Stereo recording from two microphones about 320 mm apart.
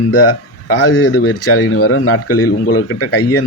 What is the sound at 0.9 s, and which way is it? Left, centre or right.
A man's voice, left.